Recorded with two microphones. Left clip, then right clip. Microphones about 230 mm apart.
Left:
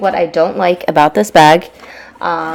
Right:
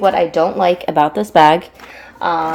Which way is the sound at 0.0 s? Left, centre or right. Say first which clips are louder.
Left 1 dB; left.